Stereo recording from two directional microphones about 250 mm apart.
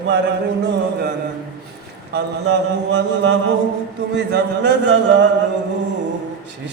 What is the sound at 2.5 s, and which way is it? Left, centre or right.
Music, right.